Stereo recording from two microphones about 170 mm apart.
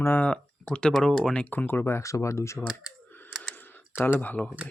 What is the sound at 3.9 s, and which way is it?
Speech, 10° left (ahead or behind).